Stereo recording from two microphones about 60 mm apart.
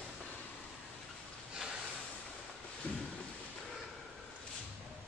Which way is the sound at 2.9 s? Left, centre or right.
Left.